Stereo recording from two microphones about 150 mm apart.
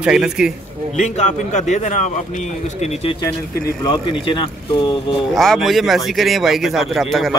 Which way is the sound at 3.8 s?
35° left (ahead or behind).